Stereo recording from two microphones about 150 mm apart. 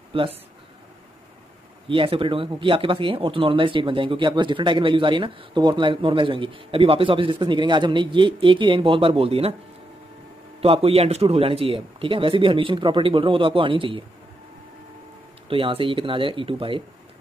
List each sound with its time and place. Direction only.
0.1 s speech: 35° right (ahead or behind)
1.9 s speech: 35° right (ahead or behind)
10.6 s speech: 40° right (ahead or behind)
15.4 s speech: 35° right (ahead or behind)